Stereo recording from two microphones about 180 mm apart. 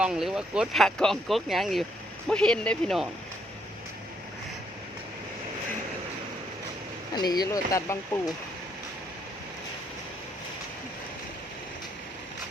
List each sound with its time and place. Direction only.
0.0 s speech: 5° right (ahead or behind)
7.1 s speech: 20° left (ahead or behind)